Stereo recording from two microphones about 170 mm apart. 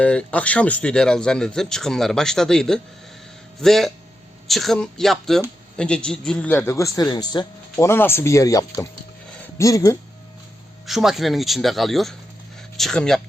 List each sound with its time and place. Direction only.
0.0 s a man's voice: 5° left (ahead or behind)
10.8 s speech: centre (ahead or behind)